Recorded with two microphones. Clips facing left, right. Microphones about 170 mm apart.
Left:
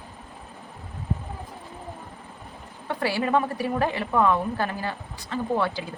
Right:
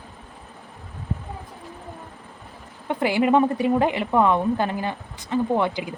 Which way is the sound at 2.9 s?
20° right (ahead or behind).